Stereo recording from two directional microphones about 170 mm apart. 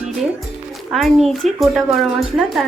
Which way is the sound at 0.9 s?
Centre (ahead or behind).